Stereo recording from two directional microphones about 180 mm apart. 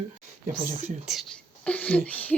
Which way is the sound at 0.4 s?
50° right (ahead or behind).